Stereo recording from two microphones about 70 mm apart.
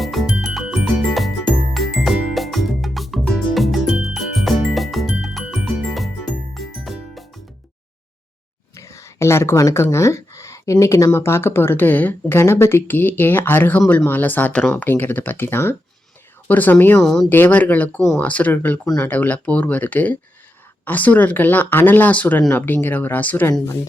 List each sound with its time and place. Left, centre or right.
0.0 s music: centre
8.7 s speech: left
12.4 s speech: left
17.0 s speech: centre
17.2 s speech: left